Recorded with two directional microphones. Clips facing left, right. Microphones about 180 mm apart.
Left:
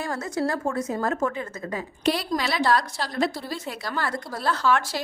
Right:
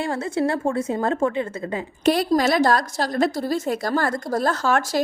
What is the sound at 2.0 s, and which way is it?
A woman's voice, 45° right (ahead or behind).